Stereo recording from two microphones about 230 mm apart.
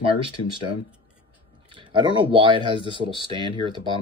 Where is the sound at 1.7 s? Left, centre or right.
Right.